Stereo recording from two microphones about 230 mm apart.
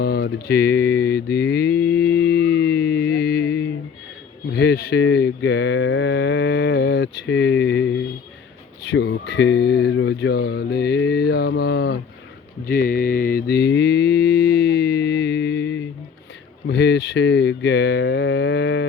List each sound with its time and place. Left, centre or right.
0.0 s mantra: left
4.5 s speech: left
12.6 s mantra: left
16.6 s speech: left